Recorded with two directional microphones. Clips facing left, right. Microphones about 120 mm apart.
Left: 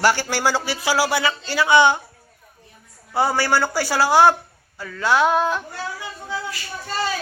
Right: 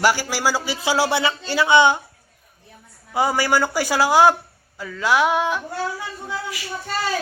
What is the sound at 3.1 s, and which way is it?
Music, 15° right (ahead or behind).